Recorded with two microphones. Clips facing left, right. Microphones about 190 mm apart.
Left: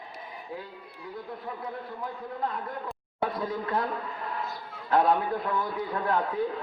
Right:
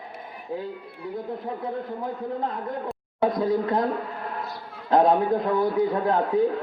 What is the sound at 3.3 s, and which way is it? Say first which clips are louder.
Speech: right 10 dB; 40° right (ahead or behind).